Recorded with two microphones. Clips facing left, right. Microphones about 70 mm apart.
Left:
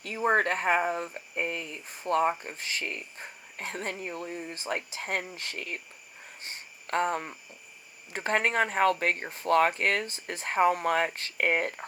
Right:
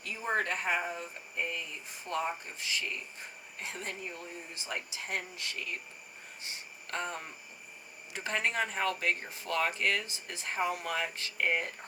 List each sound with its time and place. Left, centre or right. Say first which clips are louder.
0.0 s speech: left 7 dB; left